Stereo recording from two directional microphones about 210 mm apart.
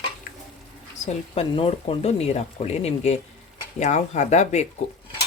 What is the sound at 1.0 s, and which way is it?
Speech, 30° left (ahead or behind).